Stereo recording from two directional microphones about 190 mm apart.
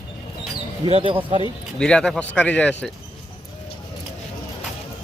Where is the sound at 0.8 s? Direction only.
25° right (ahead or behind).